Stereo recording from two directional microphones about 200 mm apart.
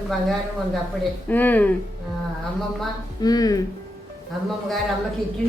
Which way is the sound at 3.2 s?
20° left (ahead or behind).